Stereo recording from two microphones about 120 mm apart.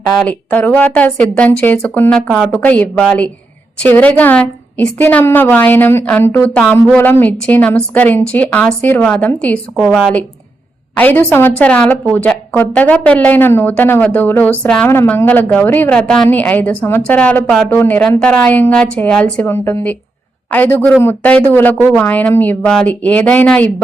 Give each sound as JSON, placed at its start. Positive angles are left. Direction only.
{"t": 0.3, "sound": "a woman's voice", "side_deg": 15}